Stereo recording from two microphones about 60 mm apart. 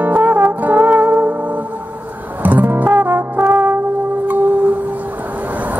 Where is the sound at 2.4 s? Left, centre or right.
Right.